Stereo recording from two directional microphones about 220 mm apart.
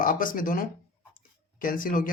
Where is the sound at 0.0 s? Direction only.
40° left (ahead or behind).